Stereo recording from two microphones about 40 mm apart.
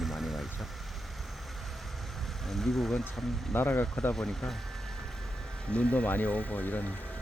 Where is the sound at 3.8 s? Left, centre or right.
Centre.